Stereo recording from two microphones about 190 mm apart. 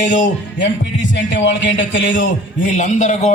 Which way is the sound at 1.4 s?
70° left (ahead or behind).